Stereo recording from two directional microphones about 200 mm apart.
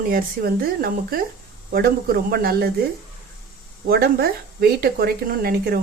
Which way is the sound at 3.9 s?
50° right (ahead or behind).